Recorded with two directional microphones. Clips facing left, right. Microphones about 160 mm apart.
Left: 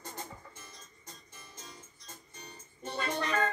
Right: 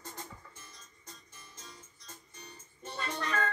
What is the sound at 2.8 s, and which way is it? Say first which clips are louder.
Music: left 3 dB; 15° left (ahead or behind).